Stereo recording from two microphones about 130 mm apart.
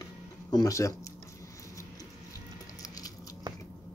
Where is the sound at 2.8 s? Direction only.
30° left (ahead or behind).